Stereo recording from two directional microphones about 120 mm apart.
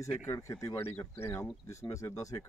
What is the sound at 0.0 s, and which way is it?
Speech, 25° left (ahead or behind).